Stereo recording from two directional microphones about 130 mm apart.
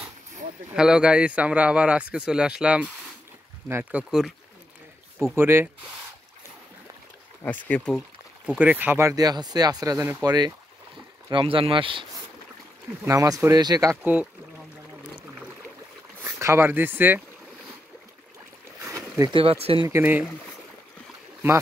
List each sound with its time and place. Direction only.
0.7 s a man's voice: 5° right (ahead or behind)
5.2 s speech: 20° right (ahead or behind)
7.4 s speech: 10° left (ahead or behind)
8.5 s speech: 10° right (ahead or behind); by 10.5 s 30° right (ahead or behind)
11.3 s speech: 45° right (ahead or behind)
13.0 s speech: 25° right (ahead or behind)
16.3 s speech: 20° right (ahead or behind)
18.8 s boat: 20° right (ahead or behind)
19.3 s speech: 50° right (ahead or behind)
19.9 s a man's voice: 15° right (ahead or behind)